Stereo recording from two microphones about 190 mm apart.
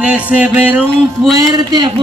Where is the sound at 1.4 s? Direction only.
20° right (ahead or behind).